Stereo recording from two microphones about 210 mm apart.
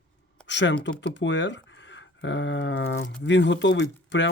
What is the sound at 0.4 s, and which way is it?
Computer keyboard, 60° left (ahead or behind).